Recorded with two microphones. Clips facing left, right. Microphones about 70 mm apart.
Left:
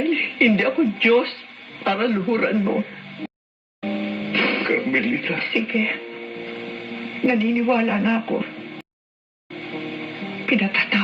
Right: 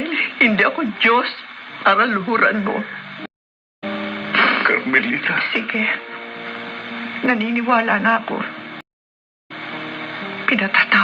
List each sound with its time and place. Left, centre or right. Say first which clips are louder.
0.0 s speech: even; right
3.8 s television: right 1 dB; right
9.6 s music: right 1 dB; right